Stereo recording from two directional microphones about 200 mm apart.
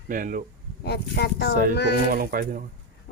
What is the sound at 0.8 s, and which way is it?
Speech, 55° left (ahead or behind).